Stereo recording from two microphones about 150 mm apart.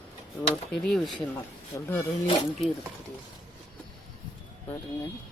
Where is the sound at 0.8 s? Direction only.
Centre (ahead or behind).